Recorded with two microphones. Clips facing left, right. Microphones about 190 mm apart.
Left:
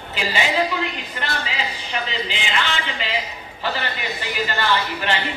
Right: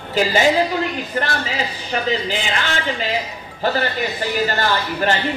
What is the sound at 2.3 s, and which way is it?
Speech, 45° right (ahead or behind).